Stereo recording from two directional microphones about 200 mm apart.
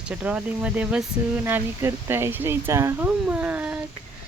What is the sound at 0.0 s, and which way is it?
Speech, 5° right (ahead or behind).